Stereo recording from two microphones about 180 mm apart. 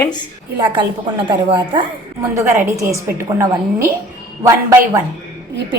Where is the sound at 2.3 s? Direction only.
15° right (ahead or behind).